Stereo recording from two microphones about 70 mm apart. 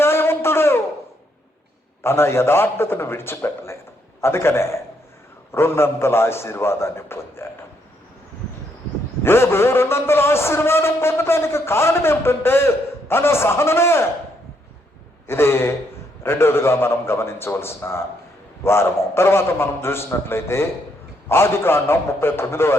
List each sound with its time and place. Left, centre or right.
0.0 s a sound: left
2.0 s a man's voice: left
9.2 s a man's voice: left
15.3 s a man's voice: left